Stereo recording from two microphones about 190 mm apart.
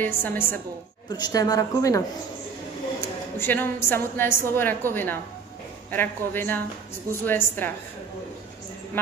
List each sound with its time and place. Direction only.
0.0 s a woman's voice: 10° left (ahead or behind)
3.3 s a woman's voice: 10° left (ahead or behind)